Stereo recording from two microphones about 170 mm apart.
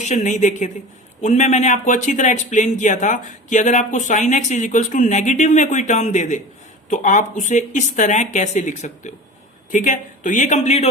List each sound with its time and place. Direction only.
0.0 s speech: 45° left (ahead or behind)